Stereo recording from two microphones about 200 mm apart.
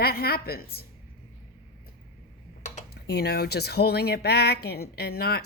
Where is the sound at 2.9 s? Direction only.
55° left (ahead or behind).